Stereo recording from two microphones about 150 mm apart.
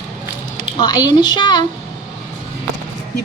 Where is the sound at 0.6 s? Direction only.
30° left (ahead or behind).